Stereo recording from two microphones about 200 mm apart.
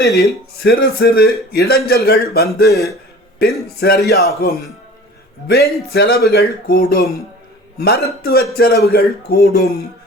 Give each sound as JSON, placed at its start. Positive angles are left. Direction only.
{"t": 0.5, "sound": "a man's voice", "side_deg": 50}